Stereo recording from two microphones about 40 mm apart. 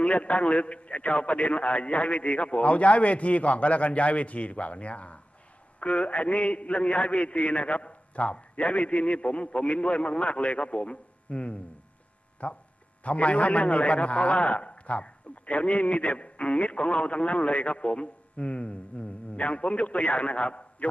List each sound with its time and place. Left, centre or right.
0.0 s a man's voice: left